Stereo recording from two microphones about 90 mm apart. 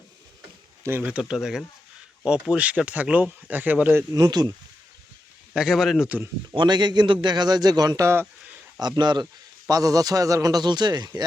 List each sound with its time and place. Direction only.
1.0 s speech: 10° right (ahead or behind)
4.1 s a man's voice: 50° right (ahead or behind)
5.5 s speech: 5° right (ahead or behind)
6.5 s a man's voice: 55° right (ahead or behind)
8.0 s speech: 25° right (ahead or behind)
9.0 s a man's voice: 55° right (ahead or behind)
9.6 s a man's voice: 40° right (ahead or behind)